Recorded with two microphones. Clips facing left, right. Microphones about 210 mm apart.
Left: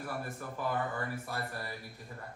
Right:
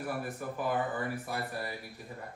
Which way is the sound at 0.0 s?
15° right (ahead or behind).